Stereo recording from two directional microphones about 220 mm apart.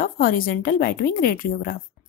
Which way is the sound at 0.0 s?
40° left (ahead or behind).